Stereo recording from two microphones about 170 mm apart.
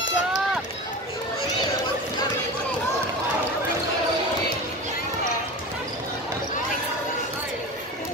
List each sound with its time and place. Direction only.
0.0 s run: 90° left